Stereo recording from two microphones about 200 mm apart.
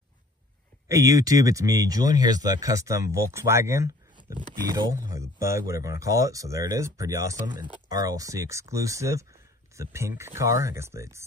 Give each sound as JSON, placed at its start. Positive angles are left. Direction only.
{"t": 0.8, "sound": "speech", "side_deg": -15}